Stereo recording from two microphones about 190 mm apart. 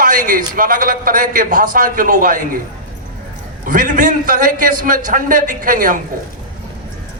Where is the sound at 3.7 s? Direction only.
45° right (ahead or behind).